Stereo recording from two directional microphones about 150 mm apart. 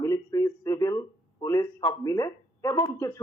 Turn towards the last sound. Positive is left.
turn(degrees=20)  # may be behind; listen again after turning